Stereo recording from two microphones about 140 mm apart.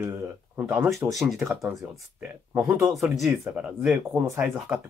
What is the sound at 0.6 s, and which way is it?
Speech, 10° right (ahead or behind).